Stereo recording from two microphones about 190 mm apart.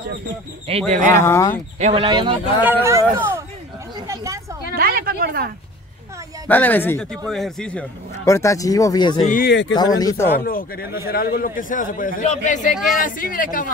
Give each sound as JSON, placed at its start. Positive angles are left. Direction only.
{"t": 0.7, "sound": "speech", "side_deg": -35}
{"t": 1.2, "sound": "speech", "side_deg": 15}
{"t": 1.8, "sound": "speech", "side_deg": -30}
{"t": 2.6, "sound": "speech", "side_deg": -15}
{"t": 4.1, "sound": "vehicle", "side_deg": -15}
{"t": 4.7, "sound": "a sound", "side_deg": -50}
{"t": 6.4, "sound": "a man's voice", "side_deg": 10}
{"t": 8.3, "sound": "speech", "side_deg": 15}
{"t": 9.5, "sound": "speech", "side_deg": 75}
{"t": 9.8, "sound": "speech", "side_deg": 20}
{"t": 10.4, "sound": "a man's voice", "side_deg": 50}